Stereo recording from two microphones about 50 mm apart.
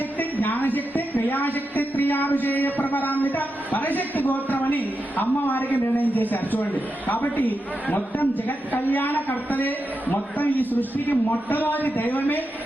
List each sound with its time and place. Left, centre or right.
0.2 s a woman's voice: left